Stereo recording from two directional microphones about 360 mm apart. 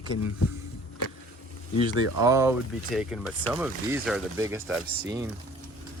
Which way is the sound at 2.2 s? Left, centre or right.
Centre.